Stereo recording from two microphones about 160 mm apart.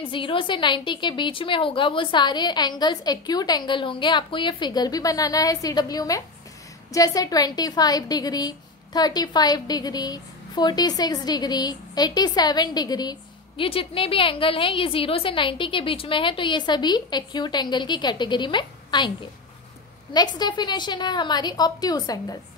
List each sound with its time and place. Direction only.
0.1 s a woman's voice: 30° left (ahead or behind)